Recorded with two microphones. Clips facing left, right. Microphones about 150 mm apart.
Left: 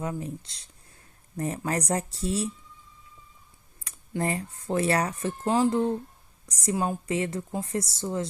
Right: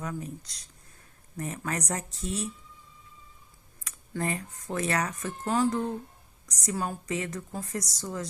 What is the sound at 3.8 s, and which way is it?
A woman's voice, 30° left (ahead or behind).